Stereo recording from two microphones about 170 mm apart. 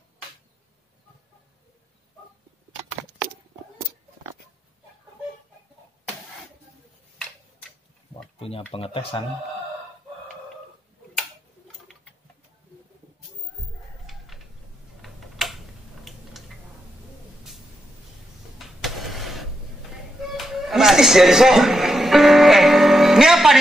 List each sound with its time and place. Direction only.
8.4 s speech: 35° left (ahead or behind)
14.0 s a sound: centre (ahead or behind)
15.0 s tick-tock: centre (ahead or behind)
16.0 s a sound: centre (ahead or behind)
18.8 s vehicle: centre (ahead or behind)
20.3 s music: centre (ahead or behind)